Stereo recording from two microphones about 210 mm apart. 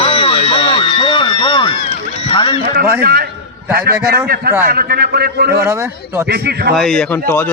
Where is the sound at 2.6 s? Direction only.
45° right (ahead or behind).